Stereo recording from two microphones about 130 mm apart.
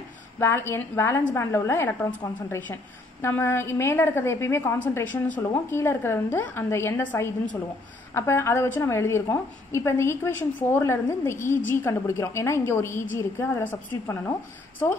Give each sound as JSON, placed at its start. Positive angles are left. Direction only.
{"t": 0.4, "sound": "a woman's voice", "side_deg": 20}